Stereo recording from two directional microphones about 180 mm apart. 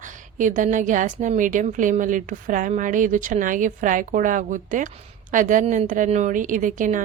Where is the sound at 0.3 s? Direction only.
45° right (ahead or behind).